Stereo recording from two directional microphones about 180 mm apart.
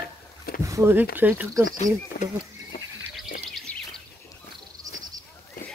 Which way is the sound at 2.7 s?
50° left (ahead or behind).